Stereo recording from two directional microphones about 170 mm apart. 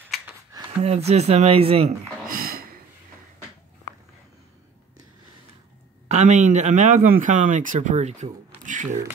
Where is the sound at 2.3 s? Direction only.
60° right (ahead or behind).